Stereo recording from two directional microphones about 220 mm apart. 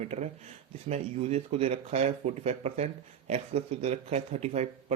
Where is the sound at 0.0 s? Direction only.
30° right (ahead or behind).